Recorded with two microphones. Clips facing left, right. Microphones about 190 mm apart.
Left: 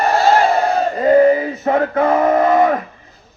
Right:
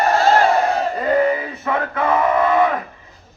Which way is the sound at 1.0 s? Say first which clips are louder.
Left 8 dB; 40° left (ahead or behind).